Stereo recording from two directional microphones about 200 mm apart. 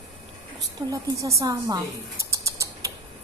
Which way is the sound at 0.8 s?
15° right (ahead or behind).